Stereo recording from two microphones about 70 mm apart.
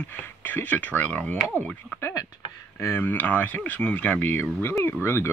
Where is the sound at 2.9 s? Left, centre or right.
Left.